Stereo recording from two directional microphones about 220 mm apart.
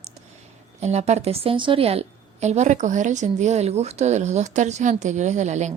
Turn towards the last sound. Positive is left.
turn(degrees=-30)  # may be behind; listen again after turning